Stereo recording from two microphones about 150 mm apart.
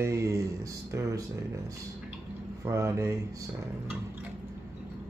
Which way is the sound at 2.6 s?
20° right (ahead or behind).